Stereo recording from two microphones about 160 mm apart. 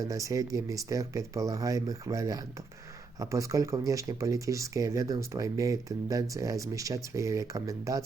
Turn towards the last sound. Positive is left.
turn(degrees=-20)  # may be behind; listen again after turning